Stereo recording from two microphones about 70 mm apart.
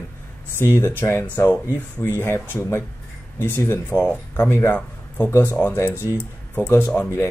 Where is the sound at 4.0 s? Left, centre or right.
Left.